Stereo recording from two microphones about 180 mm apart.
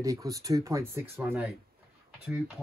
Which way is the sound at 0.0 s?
20° right (ahead or behind).